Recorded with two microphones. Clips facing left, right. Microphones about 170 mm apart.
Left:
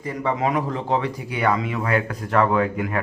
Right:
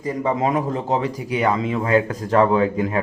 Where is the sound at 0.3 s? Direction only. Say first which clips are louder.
Right 1 dB; 25° right (ahead or behind).